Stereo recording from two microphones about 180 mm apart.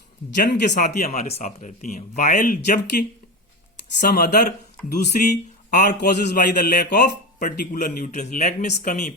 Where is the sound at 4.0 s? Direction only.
45° left (ahead or behind).